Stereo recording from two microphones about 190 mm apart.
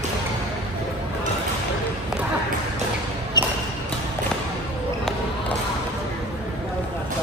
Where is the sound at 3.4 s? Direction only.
20° left (ahead or behind).